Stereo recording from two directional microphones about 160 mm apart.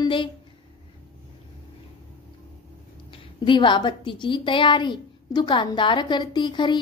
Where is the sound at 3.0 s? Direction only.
30° left (ahead or behind).